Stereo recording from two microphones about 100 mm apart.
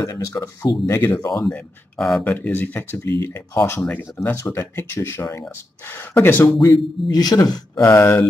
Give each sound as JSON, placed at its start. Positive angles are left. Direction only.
{"t": 0.0, "sound": "speech", "side_deg": 35}
{"t": 1.5, "sound": "speech", "side_deg": 5}
{"t": 2.2, "sound": "speech", "side_deg": 20}
{"t": 3.0, "sound": "speech", "side_deg": 40}
{"t": 6.4, "sound": "speech", "side_deg": 35}
{"t": 7.8, "sound": "speech", "side_deg": 25}